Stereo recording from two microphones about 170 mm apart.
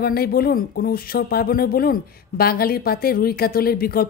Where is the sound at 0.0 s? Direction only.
65° left (ahead or behind).